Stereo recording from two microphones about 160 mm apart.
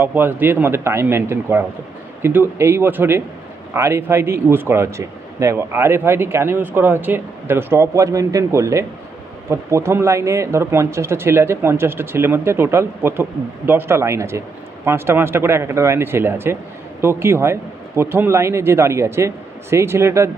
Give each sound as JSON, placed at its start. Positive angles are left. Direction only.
{"t": 0.0, "sound": "speech", "side_deg": -15}